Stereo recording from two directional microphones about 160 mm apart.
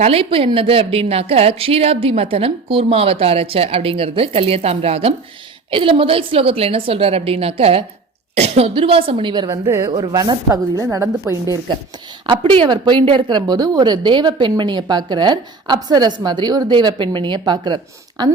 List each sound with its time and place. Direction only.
0.0 s a woman's voice: 35° right (ahead or behind); by 11.3 s 15° right (ahead or behind)
12.2 s speech: 35° right (ahead or behind)